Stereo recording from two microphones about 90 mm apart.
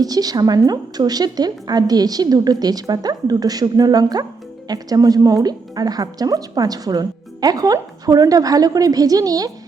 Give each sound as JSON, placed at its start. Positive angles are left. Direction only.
{"t": 0.0, "sound": "a woman's voice", "side_deg": -45}